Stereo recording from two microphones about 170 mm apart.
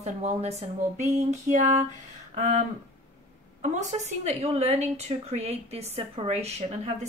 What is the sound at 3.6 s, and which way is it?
A woman's voice, 40° right (ahead or behind).